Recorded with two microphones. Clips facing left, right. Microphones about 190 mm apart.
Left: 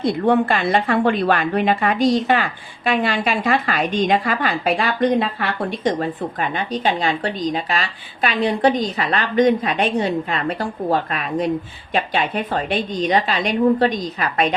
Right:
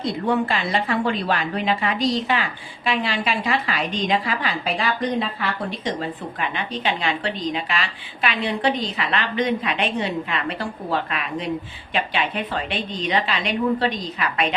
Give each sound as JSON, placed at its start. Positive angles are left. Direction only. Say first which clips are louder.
{"t": 0.0, "sound": "a woman's voice", "louder": "left 5 dB", "side_deg": 55}